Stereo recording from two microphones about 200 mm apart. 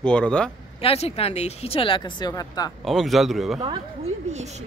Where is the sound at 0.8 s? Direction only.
30° left (ahead or behind).